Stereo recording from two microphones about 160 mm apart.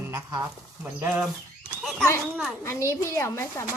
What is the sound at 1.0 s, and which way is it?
Speech, 5° right (ahead or behind).